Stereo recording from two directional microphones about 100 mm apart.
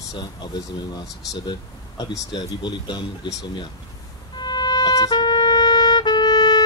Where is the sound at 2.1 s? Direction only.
45° left (ahead or behind).